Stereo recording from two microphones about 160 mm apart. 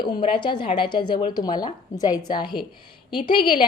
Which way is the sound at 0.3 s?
30° left (ahead or behind).